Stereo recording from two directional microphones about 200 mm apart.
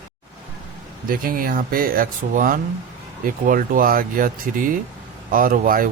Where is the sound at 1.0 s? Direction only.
45° right (ahead or behind).